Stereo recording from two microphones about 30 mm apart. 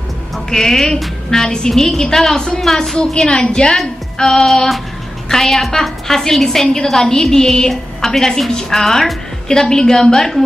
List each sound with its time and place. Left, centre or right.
0.5 s a woman's voice: centre
3.0 s a woman's voice: left
5.3 s a woman's voice: centre
9.5 s a woman's voice: centre